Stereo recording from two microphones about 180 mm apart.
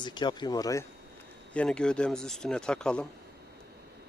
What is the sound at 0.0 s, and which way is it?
Speech, 25° left (ahead or behind).